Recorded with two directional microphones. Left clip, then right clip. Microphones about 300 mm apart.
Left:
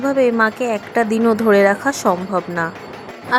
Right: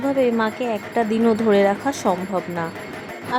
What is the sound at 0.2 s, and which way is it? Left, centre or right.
Speech, right.